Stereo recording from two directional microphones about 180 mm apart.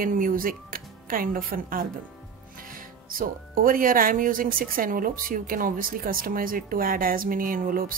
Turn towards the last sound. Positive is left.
turn(degrees=-50)  # may be behind; listen again after turning